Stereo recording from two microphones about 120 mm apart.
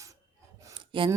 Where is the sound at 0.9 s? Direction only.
45° right (ahead or behind).